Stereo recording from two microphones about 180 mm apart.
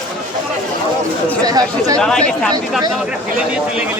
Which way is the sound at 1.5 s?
20° right (ahead or behind).